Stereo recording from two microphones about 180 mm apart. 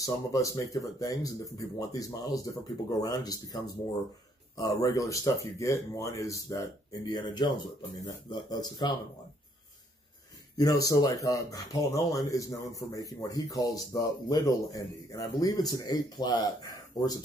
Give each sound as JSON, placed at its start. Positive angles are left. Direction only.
{"t": 0.0, "sound": "speech", "side_deg": 20}
{"t": 10.6, "sound": "speech", "side_deg": 20}